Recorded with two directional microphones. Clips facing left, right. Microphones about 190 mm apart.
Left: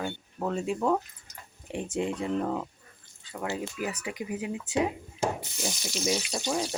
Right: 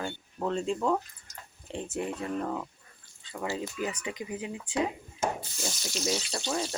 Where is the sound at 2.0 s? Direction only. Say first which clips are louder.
Left 4 dB; 20° left (ahead or behind).